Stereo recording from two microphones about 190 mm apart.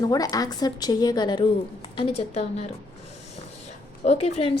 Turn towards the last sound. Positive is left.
turn(degrees=30)  # may be behind; listen again after turning